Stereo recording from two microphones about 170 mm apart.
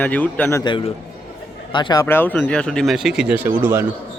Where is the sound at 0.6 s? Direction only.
30° left (ahead or behind).